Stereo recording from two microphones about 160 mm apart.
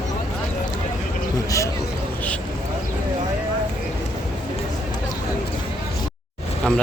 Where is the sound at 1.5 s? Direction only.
20° left (ahead or behind).